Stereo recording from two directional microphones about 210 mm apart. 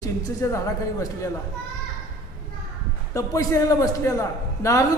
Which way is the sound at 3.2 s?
15° left (ahead or behind).